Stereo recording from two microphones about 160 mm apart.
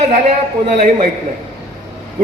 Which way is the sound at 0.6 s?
50° right (ahead or behind).